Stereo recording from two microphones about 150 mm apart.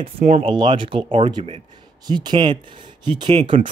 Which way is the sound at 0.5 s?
30° right (ahead or behind).